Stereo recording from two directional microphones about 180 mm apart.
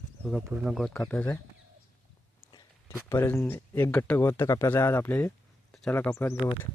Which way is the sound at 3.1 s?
10° left (ahead or behind).